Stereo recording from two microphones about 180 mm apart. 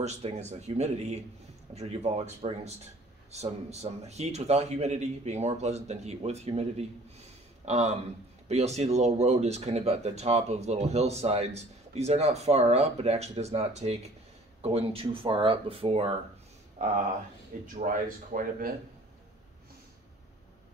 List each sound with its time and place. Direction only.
0.0 s speech: 40° right (ahead or behind)